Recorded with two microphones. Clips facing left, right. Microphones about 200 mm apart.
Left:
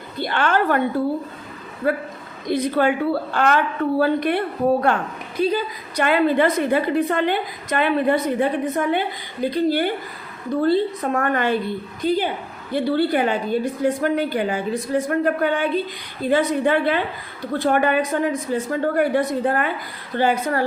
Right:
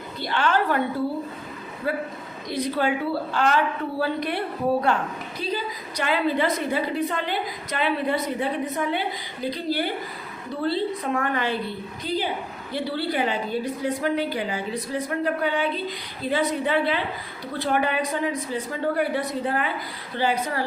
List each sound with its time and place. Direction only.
0.2 s a woman's voice: 55° left (ahead or behind)
1.8 s a woman's voice: 50° left (ahead or behind)
5.4 s a woman's voice: 55° left (ahead or behind)